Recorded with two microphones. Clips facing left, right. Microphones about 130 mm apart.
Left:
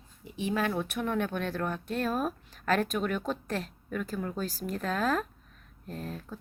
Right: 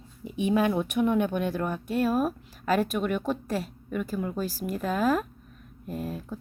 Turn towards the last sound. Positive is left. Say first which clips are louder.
# right 5 dB
turn(degrees=-10)  # may be behind; listen again after turning